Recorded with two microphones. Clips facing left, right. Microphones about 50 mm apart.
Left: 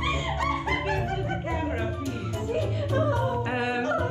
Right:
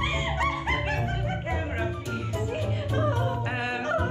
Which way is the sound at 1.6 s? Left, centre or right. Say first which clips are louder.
Left 2 dB; centre.